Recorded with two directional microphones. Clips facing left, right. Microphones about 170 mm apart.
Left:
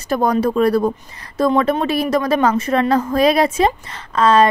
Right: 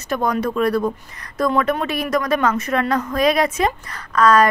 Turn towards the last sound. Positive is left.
turn(degrees=25)  # may be behind; listen again after turning